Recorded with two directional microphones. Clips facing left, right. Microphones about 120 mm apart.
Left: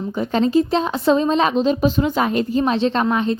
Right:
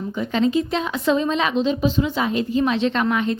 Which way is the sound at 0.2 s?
35° left (ahead or behind).